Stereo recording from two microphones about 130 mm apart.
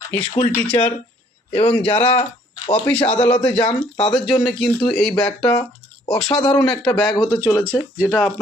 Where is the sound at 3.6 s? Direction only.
45° left (ahead or behind).